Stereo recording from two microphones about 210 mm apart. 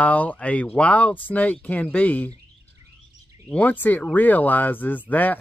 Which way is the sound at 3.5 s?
10° left (ahead or behind).